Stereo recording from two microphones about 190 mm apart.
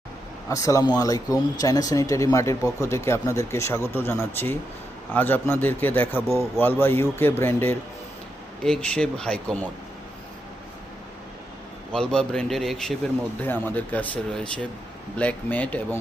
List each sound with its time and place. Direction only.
0.4 s a man's voice: 15° left (ahead or behind)
11.9 s a man's voice: 5° left (ahead or behind)